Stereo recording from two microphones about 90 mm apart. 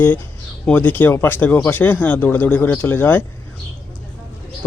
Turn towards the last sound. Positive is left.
turn(degrees=20)  # may be behind; listen again after turning